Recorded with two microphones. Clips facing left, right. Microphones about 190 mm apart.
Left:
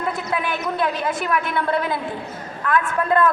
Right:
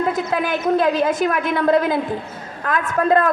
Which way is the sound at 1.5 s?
40° right (ahead or behind).